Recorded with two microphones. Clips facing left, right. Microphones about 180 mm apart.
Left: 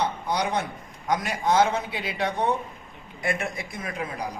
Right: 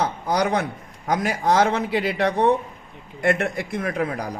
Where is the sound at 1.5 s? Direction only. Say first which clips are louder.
Right 2 dB; 70° right (ahead or behind).